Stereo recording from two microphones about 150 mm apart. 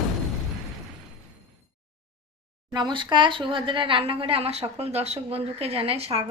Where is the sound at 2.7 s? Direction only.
30° right (ahead or behind).